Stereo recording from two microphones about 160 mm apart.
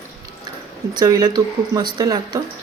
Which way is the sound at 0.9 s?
25° right (ahead or behind).